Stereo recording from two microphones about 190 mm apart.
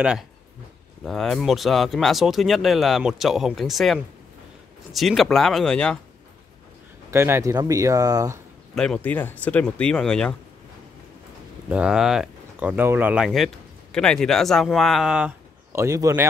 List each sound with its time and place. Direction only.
1.0 s speech: centre (ahead or behind)
7.1 s speech: 15° right (ahead or behind)
8.7 s speech: 5° left (ahead or behind)
11.7 s speech: 5° right (ahead or behind)